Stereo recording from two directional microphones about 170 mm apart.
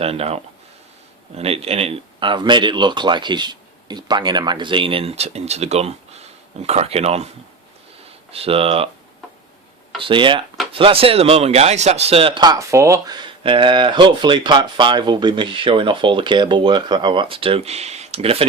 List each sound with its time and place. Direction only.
0.0 s speech: 35° right (ahead or behind)
1.4 s speech: 35° right (ahead or behind)
8.3 s speech: 35° right (ahead or behind)
10.0 s speech: 30° right (ahead or behind)